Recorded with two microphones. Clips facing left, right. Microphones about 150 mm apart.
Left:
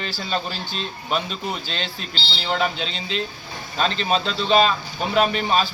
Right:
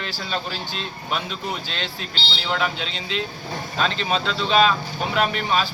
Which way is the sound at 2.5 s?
30° left (ahead or behind).